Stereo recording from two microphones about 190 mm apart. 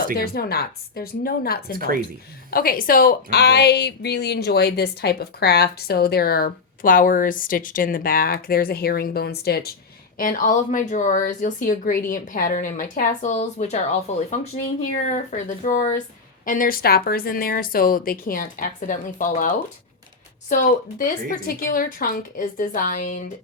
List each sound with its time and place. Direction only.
0.2 s a woman's voice: 55° left (ahead or behind)
10.2 s speech: 45° left (ahead or behind)
15.1 s speech: 40° left (ahead or behind)